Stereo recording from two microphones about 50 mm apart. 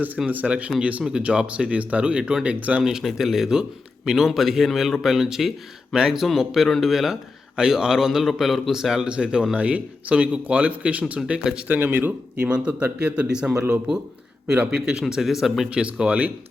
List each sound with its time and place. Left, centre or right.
0.3 s speech: right
3.0 s speech: centre
3.5 s a man's voice: centre
4.3 s speech: centre
7.5 s a man's voice: centre
11.8 s speech: right
12.4 s speech: right
15.0 s speech: centre
15.7 s speech: right